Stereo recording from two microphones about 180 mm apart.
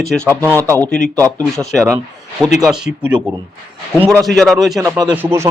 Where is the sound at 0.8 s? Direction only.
5° left (ahead or behind).